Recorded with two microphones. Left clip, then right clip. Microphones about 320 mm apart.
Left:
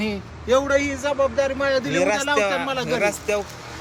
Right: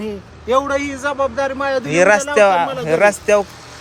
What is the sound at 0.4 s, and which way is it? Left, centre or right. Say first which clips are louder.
A man's voice: right 2 dB; right.